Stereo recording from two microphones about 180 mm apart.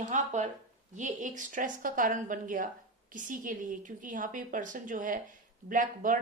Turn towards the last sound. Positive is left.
turn(degrees=-45)  # may be behind; listen again after turning